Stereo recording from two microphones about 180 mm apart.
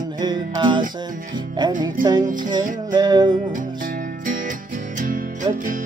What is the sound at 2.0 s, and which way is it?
Music, 50° right (ahead or behind).